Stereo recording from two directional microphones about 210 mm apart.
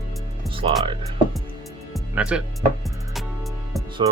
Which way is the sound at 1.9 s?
5° right (ahead or behind).